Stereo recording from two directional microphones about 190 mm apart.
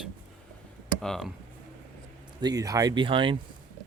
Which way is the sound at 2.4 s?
20° right (ahead or behind).